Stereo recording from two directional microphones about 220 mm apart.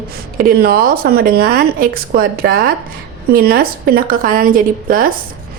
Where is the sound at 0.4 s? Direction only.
40° right (ahead or behind).